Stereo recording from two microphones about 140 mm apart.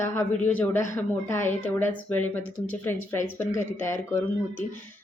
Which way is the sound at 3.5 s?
60° left (ahead or behind).